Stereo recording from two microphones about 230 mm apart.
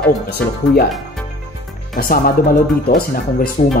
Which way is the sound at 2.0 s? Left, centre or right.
Left.